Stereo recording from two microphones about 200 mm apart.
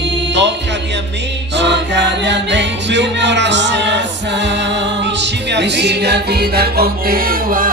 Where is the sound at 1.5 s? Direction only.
60° right (ahead or behind).